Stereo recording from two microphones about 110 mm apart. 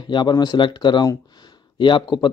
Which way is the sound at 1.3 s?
45° left (ahead or behind).